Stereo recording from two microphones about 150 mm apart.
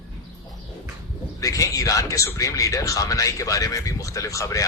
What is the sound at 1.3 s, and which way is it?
Speech, 20° left (ahead or behind).